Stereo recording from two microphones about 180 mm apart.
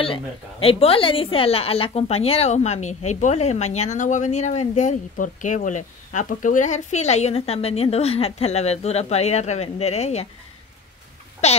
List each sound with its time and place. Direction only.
0.0 s a woman's voice: 30° left (ahead or behind)
11.4 s a woman's voice: 35° left (ahead or behind)